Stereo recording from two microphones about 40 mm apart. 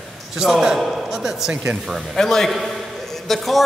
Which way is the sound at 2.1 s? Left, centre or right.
Centre.